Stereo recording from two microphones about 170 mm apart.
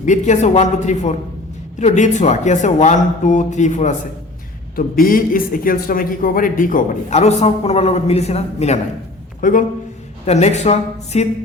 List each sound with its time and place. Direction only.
0.0 s speech: 45° left (ahead or behind)
4.9 s a man's voice: 55° left (ahead or behind); by 8.8 s 40° left (ahead or behind)
9.4 s a man's voice: 50° left (ahead or behind)
10.2 s a man's voice: 40° left (ahead or behind)